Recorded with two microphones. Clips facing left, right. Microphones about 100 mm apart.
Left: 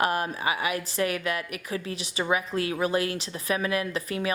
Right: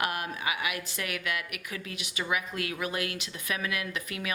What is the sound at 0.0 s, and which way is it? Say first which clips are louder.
Speech: left 6 dB; 35° left (ahead or behind).